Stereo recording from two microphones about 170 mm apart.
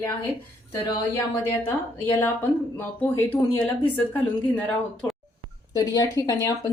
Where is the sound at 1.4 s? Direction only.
15° left (ahead or behind).